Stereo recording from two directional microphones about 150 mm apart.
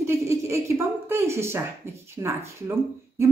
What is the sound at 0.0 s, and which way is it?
A woman's voice, 20° right (ahead or behind).